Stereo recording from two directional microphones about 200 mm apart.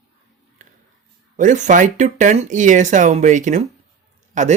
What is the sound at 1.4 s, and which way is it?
Speech, 40° right (ahead or behind).